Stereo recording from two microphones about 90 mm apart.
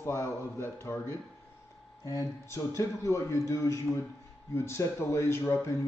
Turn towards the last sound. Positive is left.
turn(degrees=30)  # may be behind; listen again after turning